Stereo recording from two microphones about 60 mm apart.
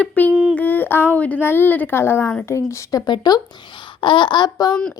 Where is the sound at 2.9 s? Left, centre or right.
Left.